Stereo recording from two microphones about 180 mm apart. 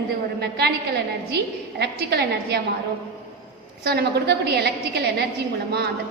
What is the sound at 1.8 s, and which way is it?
Speech, 65° right (ahead or behind).